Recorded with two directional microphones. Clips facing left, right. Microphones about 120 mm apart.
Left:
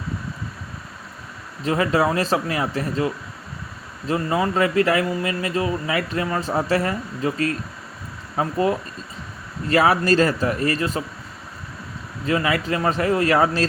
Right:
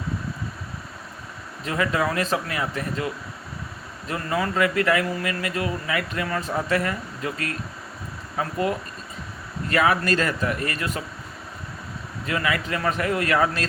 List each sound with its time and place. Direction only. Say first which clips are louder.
1.6 s speech: left 4 dB; 30° left (ahead or behind)
12.2 s speech: left 4 dB; 30° left (ahead or behind)